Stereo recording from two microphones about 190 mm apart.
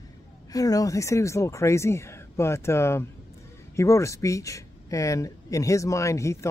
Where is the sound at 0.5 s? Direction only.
20° left (ahead or behind).